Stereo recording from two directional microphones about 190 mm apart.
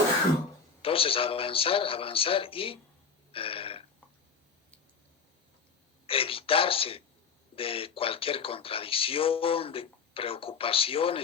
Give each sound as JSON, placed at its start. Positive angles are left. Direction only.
{"t": 0.8, "sound": "speech", "side_deg": 30}
{"t": 3.3, "sound": "burping", "side_deg": 30}
{"t": 6.1, "sound": "speech", "side_deg": 30}